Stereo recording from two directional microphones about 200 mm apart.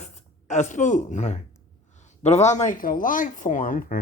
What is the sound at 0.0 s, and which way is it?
Speech, 35° left (ahead or behind).